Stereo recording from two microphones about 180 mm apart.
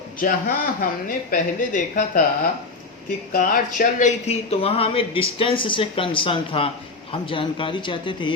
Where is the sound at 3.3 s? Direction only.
50° left (ahead or behind).